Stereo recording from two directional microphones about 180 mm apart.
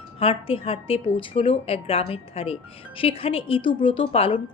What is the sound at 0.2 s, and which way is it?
A woman's voice, 30° left (ahead or behind).